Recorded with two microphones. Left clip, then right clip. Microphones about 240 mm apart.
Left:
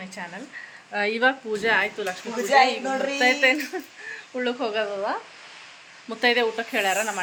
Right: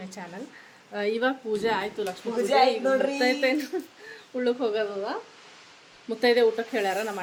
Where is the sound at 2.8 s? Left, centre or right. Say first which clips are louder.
Right 2 dB; right.